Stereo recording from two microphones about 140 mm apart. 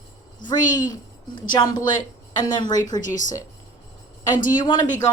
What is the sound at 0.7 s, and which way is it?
A woman's voice, 25° left (ahead or behind).